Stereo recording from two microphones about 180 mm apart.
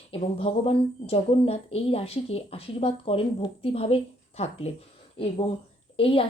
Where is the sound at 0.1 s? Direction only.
30° left (ahead or behind).